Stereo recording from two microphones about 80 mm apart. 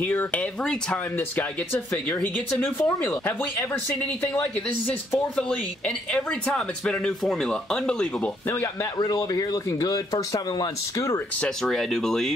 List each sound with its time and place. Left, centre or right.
0.0 s speech: left
5.3 s speech: centre
8.9 s speech: left
11.6 s speech: centre